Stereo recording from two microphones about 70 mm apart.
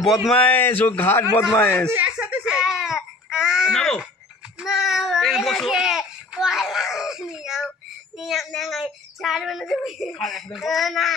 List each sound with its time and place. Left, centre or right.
0.0 s speech: centre
0.3 s speech: centre
0.6 s speech: left
2.0 s a sound: centre
3.7 s a sound: centre
4.6 s child singing: centre
5.8 s baby cry: centre
8.2 s speech: centre